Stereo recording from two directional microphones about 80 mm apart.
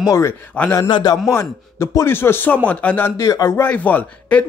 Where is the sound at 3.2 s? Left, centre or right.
Left.